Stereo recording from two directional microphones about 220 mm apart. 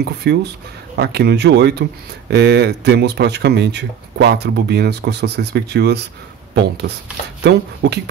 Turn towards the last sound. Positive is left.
turn(degrees=-50)  # may be behind; listen again after turning